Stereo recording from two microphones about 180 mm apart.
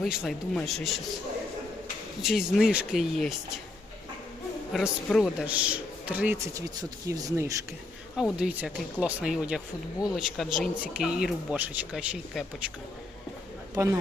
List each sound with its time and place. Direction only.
0.0 s speech: centre (ahead or behind)
2.2 s speech: centre (ahead or behind)
4.7 s a man's voice: centre (ahead or behind); by 7.6 s 15° right (ahead or behind)
8.1 s speech: 5° right (ahead or behind)